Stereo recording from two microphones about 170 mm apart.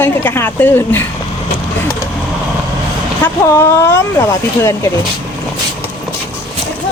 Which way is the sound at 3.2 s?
15° left (ahead or behind).